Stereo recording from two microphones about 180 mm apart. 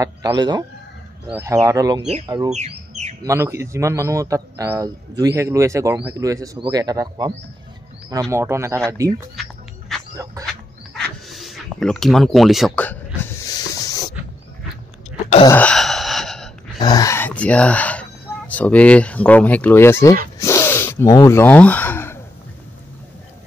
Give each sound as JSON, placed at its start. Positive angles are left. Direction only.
{"t": 0.0, "sound": "a man's voice", "side_deg": -20}
{"t": 2.5, "sound": "squawk", "side_deg": -40}
{"t": 3.3, "sound": "a man's voice", "side_deg": -15}
{"t": 9.4, "sound": "music", "side_deg": 0}
{"t": 10.4, "sound": "a man's voice", "side_deg": -20}
{"t": 11.0, "sound": "a sound", "side_deg": 0}
{"t": 13.7, "sound": "a sound", "side_deg": 20}
{"t": 15.5, "sound": "gasp", "side_deg": 5}
{"t": 16.8, "sound": "speech", "side_deg": 20}
{"t": 20.3, "sound": "gasp", "side_deg": 15}